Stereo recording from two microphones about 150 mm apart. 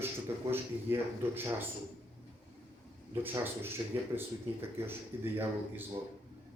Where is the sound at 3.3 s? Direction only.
15° right (ahead or behind).